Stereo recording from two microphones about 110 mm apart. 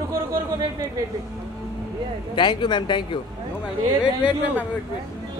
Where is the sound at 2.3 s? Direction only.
45° left (ahead or behind).